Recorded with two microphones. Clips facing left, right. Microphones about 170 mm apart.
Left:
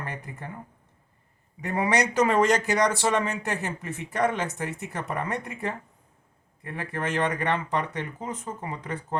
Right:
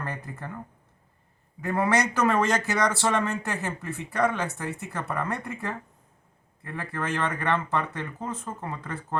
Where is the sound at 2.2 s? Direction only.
15° left (ahead or behind).